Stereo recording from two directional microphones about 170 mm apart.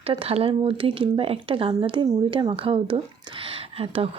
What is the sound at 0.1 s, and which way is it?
A woman's voice, 35° right (ahead or behind).